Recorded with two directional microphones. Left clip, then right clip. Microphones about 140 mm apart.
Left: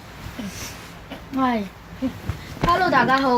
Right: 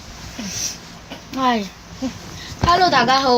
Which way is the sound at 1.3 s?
45° right (ahead or behind).